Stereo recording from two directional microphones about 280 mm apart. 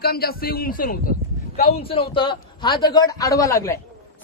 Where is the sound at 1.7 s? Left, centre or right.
Centre.